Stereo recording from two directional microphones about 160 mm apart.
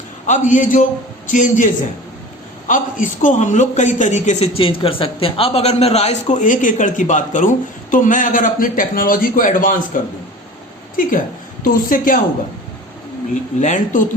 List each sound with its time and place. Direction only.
0.3 s a man's voice: 55° left (ahead or behind)
11.6 s a woman's voice: 60° left (ahead or behind)
13.6 s a man's voice: 50° left (ahead or behind)